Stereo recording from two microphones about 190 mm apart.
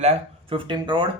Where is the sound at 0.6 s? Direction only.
25° right (ahead or behind).